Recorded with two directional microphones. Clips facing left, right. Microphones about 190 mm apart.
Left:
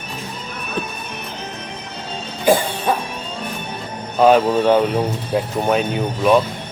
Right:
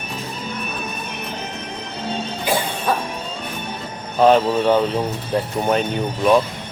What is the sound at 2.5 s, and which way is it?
Music, 50° left (ahead or behind).